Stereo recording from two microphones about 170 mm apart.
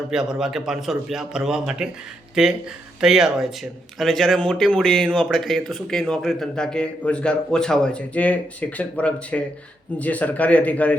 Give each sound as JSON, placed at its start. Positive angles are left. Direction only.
{"t": 0.1, "sound": "a man's voice", "side_deg": 0}